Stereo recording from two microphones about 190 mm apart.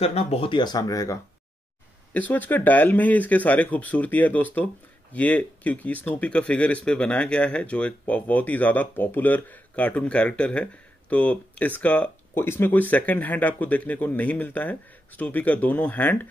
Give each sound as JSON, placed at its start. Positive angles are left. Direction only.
{"t": 0.0, "sound": "speech", "side_deg": 30}